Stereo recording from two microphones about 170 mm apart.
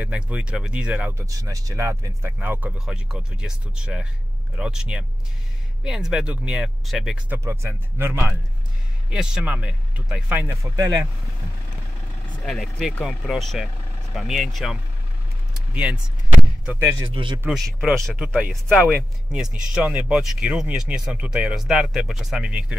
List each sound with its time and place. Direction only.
0.0 s speech: 5° right (ahead or behind)
7.2 s speech: 15° right (ahead or behind)
9.1 s speech: 5° right (ahead or behind)
10.6 s speech: 20° right (ahead or behind)
12.4 s speech: centre (ahead or behind)
15.5 s a sound: 5° right (ahead or behind)
17.0 s speech: 30° right (ahead or behind)
17.4 s speech: 5° right (ahead or behind)